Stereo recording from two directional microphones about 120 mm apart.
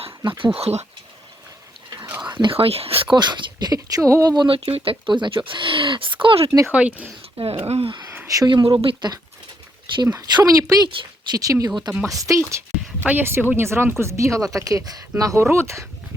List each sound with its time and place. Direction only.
0.3 s speech: 45° right (ahead or behind); by 0.9 s 60° right (ahead or behind)
2.0 s whispering: 15° right (ahead or behind)
2.3 s speech: 45° right (ahead or behind)
4.4 s speech: 50° right (ahead or behind)
6.7 s speech: 10° right (ahead or behind)
7.3 s speech: 50° right (ahead or behind)
8.3 s speech: 35° right (ahead or behind)
10.8 s speech: 45° right (ahead or behind)
11.3 s speech: 30° right (ahead or behind)